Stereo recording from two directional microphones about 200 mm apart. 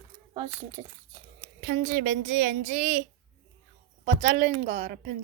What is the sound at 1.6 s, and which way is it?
A woman's voice, 40° right (ahead or behind).